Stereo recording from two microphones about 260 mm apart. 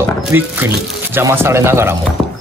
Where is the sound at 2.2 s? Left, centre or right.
Centre.